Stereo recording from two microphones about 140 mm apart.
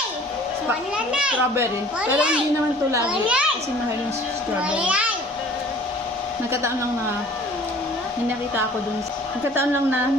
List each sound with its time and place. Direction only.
0.9 s a child's voice: 5° right (ahead or behind)
4.7 s a child's voice: 5° right (ahead or behind)